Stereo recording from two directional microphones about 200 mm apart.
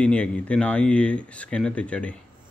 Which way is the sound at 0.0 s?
5° left (ahead or behind).